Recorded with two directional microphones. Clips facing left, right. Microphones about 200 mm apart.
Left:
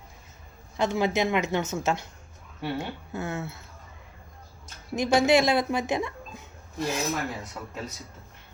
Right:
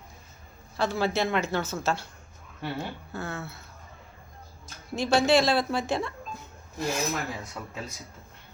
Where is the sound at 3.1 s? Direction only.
20° left (ahead or behind).